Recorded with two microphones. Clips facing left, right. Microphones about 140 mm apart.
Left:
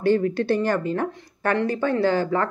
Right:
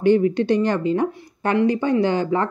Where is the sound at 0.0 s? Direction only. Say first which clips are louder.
Right 4 dB; 20° right (ahead or behind).